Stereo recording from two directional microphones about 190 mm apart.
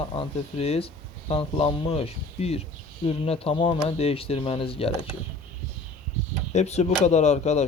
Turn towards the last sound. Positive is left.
turn(degrees=35)  # may be behind; listen again after turning